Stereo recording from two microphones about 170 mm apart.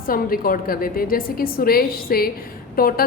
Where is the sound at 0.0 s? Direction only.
60° left (ahead or behind).